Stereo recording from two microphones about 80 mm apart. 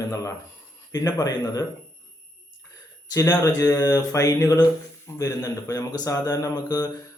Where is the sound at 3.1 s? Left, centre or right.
Left.